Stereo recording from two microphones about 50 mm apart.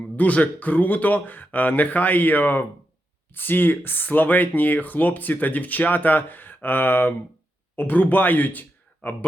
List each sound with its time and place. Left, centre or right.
0.2 s speech: left